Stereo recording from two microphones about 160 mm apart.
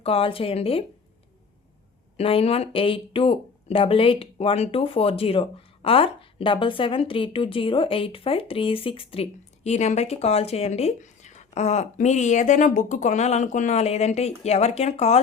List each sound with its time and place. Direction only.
0.0 s speech: 35° left (ahead or behind)
2.1 s speech: 35° left (ahead or behind)